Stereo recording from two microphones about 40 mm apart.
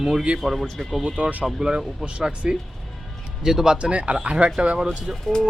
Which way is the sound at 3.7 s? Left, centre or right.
Right.